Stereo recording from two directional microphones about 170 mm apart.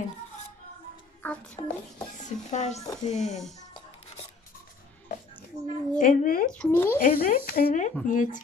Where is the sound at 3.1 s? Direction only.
Centre (ahead or behind).